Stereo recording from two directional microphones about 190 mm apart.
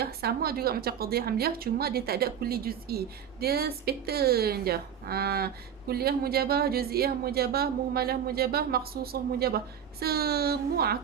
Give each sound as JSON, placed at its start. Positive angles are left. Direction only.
{"t": 0.0, "sound": "speech", "side_deg": -55}